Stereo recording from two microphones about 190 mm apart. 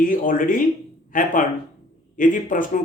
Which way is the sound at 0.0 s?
45° left (ahead or behind).